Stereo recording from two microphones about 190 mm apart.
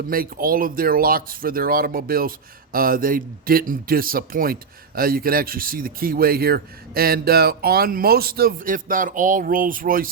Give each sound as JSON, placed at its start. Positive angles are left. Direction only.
{"t": 0.1, "sound": "speech", "side_deg": -50}